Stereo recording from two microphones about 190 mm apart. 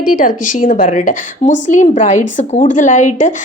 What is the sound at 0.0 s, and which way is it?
A woman's voice, 45° left (ahead or behind).